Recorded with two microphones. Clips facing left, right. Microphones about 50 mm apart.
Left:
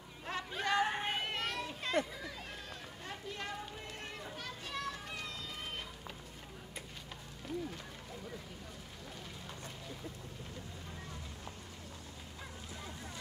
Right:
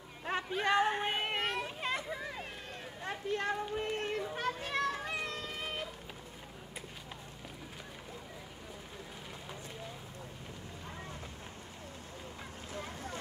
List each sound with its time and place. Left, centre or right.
0.6 s speech: right
0.8 s speech: centre
1.1 s children playing: right
3.1 s a sound: right
4.2 s children playing: right
5.2 s vehicle: right
12.7 s boat: right